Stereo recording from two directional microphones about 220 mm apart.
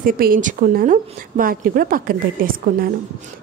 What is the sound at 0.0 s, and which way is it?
Speech, 40° right (ahead or behind).